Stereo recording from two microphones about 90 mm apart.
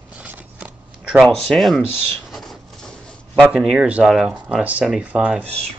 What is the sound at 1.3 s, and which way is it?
Speech, centre (ahead or behind).